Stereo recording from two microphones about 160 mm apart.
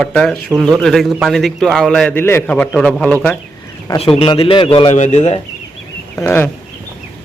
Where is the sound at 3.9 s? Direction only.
35° left (ahead or behind).